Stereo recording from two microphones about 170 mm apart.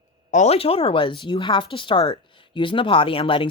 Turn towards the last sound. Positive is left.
turn(degrees=30)  # may be behind; listen again after turning